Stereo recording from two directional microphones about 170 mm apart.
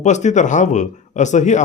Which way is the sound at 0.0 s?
45° left (ahead or behind).